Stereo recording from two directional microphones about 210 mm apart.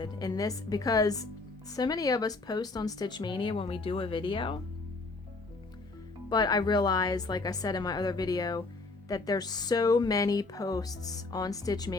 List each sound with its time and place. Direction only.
0.0 s speech: 20° left (ahead or behind)
6.3 s speech: 20° left (ahead or behind)